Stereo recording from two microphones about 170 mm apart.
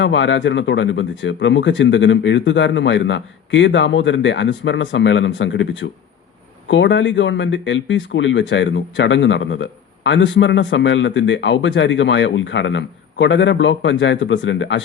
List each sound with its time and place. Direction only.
0.0 s speech: 90° left